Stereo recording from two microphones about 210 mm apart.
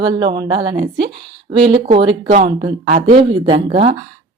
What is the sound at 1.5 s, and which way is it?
A woman's voice, 30° right (ahead or behind).